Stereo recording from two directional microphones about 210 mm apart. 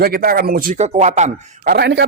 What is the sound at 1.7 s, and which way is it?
Speech, 55° right (ahead or behind).